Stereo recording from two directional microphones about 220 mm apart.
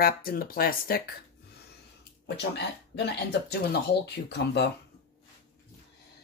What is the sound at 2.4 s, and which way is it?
Speech, 50° left (ahead or behind).